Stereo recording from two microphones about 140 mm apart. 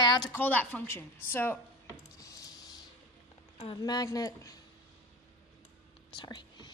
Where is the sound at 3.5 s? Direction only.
40° left (ahead or behind).